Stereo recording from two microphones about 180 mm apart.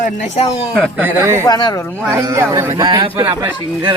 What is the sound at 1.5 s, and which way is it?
Speech, 25° left (ahead or behind).